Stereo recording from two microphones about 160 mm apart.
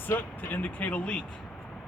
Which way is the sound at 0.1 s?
10° left (ahead or behind).